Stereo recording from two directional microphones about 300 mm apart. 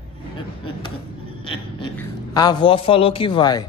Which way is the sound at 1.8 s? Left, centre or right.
Centre.